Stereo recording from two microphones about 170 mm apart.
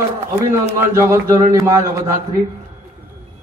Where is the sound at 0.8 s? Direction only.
15° right (ahead or behind).